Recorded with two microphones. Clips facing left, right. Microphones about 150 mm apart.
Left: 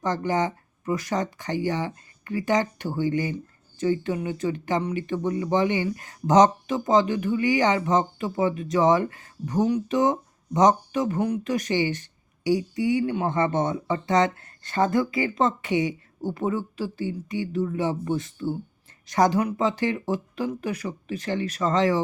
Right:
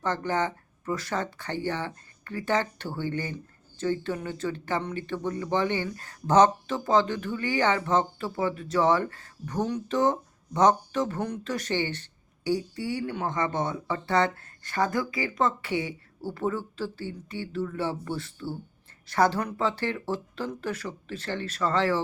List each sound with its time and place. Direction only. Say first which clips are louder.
0.0 s speech: left 3 dB; 15° left (ahead or behind)